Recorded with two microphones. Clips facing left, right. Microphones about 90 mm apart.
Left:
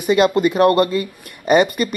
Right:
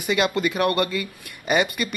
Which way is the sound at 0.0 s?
35° left (ahead or behind).